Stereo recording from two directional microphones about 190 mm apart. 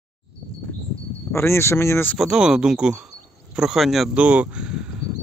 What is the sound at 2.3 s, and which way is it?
Speech, 5° right (ahead or behind).